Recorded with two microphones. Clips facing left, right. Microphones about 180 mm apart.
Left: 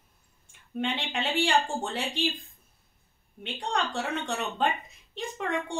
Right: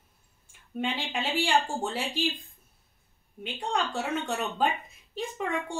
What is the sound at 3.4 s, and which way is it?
Speech, 5° right (ahead or behind).